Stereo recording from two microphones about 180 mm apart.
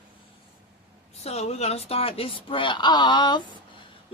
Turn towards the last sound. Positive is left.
turn(degrees=25)  # may be behind; listen again after turning